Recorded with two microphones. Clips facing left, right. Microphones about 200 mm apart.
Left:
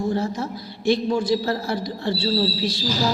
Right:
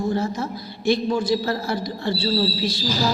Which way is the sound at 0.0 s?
30° left (ahead or behind).